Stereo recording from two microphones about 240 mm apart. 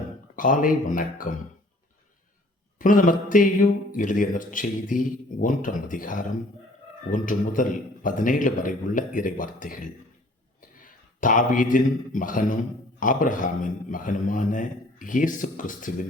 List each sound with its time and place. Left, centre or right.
0.3 s a man's voice: left
2.7 s a man's voice: left